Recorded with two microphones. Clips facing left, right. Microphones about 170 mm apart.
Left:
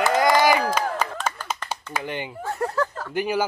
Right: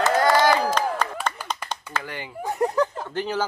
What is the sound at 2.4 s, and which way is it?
Speech, 15° right (ahead or behind).